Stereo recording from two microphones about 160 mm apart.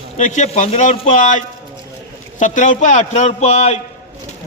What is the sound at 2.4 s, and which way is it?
A man's voice, 50° left (ahead or behind).